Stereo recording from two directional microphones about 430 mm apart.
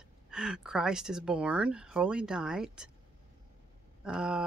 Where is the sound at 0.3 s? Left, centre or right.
Centre.